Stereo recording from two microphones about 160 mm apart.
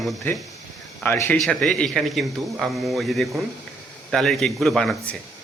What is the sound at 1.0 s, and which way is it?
Speech, 15° left (ahead or behind).